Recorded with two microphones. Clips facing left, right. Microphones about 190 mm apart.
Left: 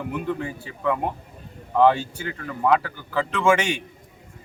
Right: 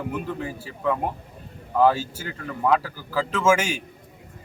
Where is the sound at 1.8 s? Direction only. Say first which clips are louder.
Left 1 dB; 5° right (ahead or behind).